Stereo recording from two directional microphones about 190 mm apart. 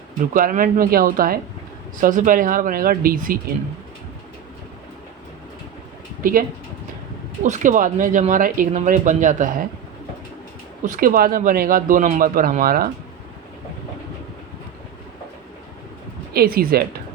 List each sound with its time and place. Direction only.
0.3 s speech: 45° right (ahead or behind)
6.2 s speech: 50° right (ahead or behind)
7.4 s speech: 40° right (ahead or behind)
10.8 s speech: 45° right (ahead or behind)
16.3 s speech: 55° right (ahead or behind)